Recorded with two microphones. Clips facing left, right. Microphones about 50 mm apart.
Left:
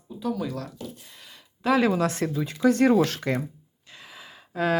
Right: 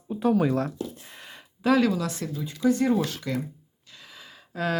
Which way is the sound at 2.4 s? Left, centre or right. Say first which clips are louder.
Left 3 dB; left.